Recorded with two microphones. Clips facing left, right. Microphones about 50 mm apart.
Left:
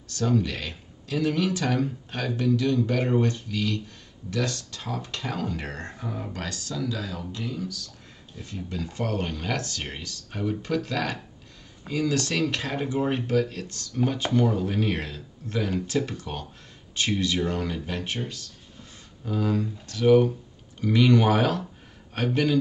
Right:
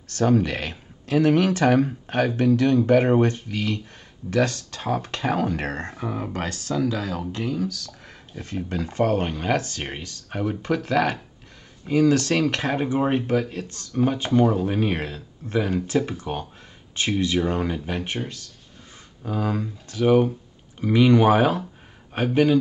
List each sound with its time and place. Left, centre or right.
0.1 s speech: right
4.3 s speech: right
7.6 s speech: right
8.4 s speech: right
19.2 s speech: centre